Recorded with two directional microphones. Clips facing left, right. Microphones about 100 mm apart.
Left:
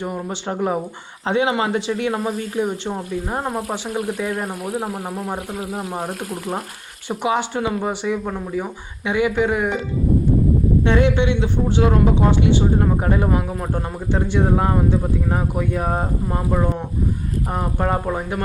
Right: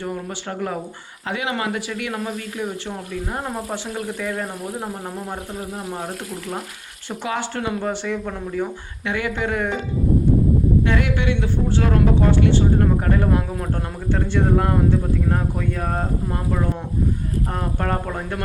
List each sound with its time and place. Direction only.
0.0 s speech: 20° left (ahead or behind)
7.1 s speech: 20° left (ahead or behind)
10.8 s speech: 25° left (ahead or behind)